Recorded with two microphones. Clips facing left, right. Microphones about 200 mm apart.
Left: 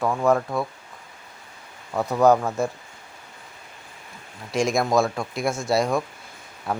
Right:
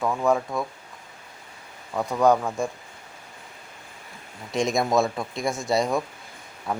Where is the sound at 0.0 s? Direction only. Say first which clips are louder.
Left 2 dB; centre (ahead or behind).